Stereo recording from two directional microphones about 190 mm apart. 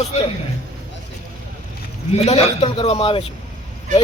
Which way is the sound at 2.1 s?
35° left (ahead or behind).